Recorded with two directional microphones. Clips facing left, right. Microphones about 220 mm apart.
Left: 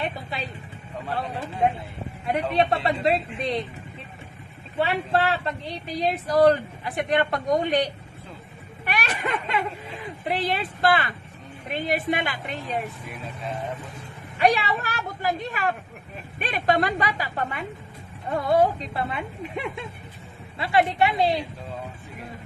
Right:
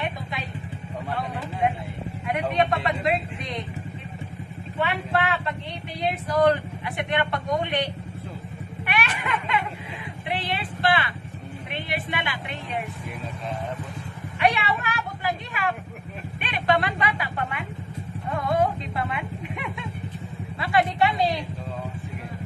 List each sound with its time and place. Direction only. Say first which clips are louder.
0.0 s vehicle: left 1 dB; 30° left (ahead or behind)
2.5 s speech: left 1 dB; 35° left (ahead or behind)
4.7 s a woman's voice: left 2 dB; 35° left (ahead or behind)
14.4 s a woman's voice: left 2 dB; 40° left (ahead or behind)